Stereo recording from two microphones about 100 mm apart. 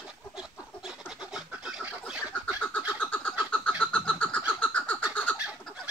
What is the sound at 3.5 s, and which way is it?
Bird, 10° left (ahead or behind).